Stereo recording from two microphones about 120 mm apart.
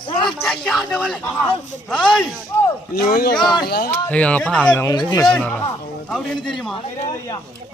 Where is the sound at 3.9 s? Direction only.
10° left (ahead or behind).